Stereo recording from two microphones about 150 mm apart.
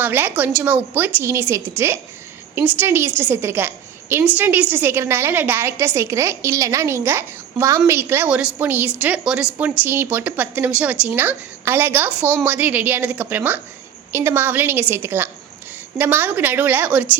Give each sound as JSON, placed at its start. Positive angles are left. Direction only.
{"t": 0.0, "sound": "a woman's voice", "side_deg": -15}